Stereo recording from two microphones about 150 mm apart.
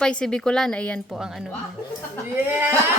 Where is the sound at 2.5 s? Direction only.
10° right (ahead or behind).